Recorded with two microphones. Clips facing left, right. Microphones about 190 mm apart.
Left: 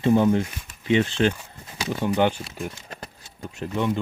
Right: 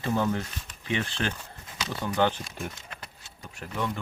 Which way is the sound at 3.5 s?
20° left (ahead or behind).